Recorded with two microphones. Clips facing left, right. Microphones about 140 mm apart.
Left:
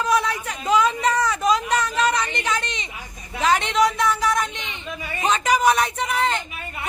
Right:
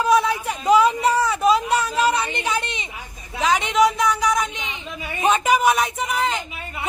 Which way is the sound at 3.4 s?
Centre (ahead or behind).